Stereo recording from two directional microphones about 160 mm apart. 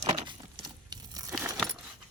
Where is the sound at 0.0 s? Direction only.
25° right (ahead or behind).